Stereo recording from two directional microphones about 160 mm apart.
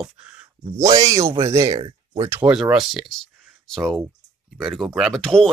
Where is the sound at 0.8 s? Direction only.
20° right (ahead or behind).